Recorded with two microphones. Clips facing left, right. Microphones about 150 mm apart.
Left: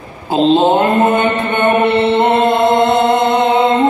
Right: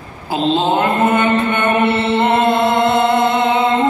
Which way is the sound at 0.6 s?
45° left (ahead or behind).